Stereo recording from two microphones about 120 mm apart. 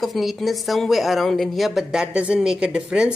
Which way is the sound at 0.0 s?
Centre (ahead or behind).